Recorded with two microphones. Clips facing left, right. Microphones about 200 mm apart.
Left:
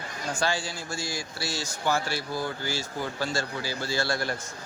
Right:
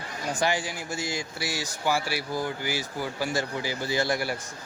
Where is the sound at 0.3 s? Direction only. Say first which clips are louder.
Right 2 dB; 15° right (ahead or behind).